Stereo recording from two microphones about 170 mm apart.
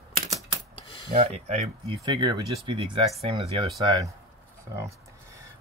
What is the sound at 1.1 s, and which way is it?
Speech, 40° right (ahead or behind).